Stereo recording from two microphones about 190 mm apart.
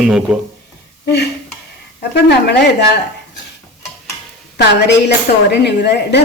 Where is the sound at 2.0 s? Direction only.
60° left (ahead or behind).